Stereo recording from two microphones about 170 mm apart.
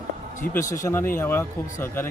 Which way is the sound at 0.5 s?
20° left (ahead or behind).